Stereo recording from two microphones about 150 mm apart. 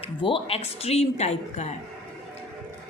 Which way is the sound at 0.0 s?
35° left (ahead or behind).